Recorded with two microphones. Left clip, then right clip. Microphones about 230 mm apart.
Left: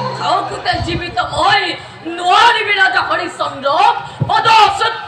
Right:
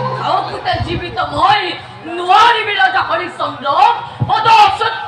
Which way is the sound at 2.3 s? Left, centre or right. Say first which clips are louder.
Even; left.